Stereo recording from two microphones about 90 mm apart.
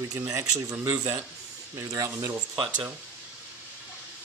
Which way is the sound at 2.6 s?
15° right (ahead or behind).